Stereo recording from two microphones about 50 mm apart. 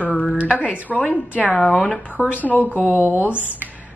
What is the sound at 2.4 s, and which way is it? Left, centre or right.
Speech, left.